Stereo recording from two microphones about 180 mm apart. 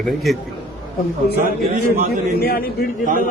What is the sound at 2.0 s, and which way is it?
Speech, 55° left (ahead or behind).